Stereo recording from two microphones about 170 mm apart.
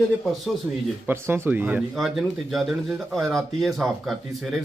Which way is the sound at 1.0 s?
15° right (ahead or behind).